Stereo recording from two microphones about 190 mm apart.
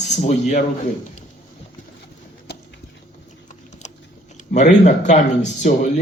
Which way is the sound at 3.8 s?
35° left (ahead or behind).